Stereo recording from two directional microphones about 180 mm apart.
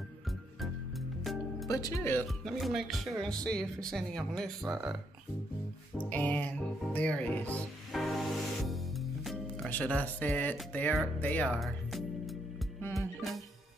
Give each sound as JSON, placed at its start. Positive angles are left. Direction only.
{"t": 1.2, "sound": "music", "side_deg": 0}
{"t": 1.7, "sound": "speech", "side_deg": 20}
{"t": 2.2, "sound": "speech", "side_deg": 0}
{"t": 5.9, "sound": "speech", "side_deg": 10}
{"t": 8.6, "sound": "music", "side_deg": 0}
{"t": 10.6, "sound": "speech", "side_deg": 5}
{"t": 12.9, "sound": "music", "side_deg": 0}